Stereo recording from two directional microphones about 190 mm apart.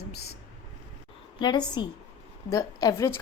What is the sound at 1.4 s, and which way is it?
A woman's voice, 20° left (ahead or behind).